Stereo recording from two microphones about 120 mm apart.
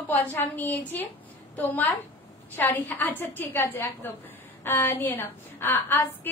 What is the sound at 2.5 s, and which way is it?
A woman's voice, 15° left (ahead or behind).